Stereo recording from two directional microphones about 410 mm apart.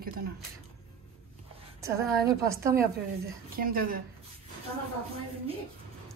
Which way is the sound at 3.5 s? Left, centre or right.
Right.